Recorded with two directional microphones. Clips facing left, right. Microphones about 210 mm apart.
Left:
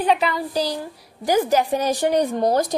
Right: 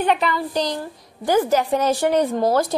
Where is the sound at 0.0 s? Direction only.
5° left (ahead or behind).